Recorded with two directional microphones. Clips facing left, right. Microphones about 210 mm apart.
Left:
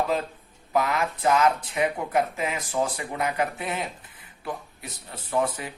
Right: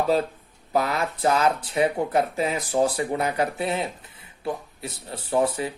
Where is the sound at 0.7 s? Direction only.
35° right (ahead or behind).